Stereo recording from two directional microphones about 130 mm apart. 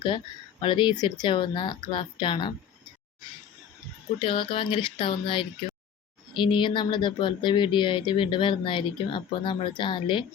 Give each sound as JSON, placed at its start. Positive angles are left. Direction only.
{"t": 0.6, "sound": "speech", "side_deg": 35}
{"t": 4.2, "sound": "speech", "side_deg": 40}